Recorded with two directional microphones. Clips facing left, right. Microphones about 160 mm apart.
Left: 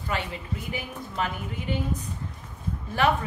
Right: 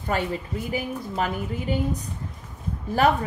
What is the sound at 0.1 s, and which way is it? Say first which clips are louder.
A woman's voice: right 5 dB; 45° right (ahead or behind).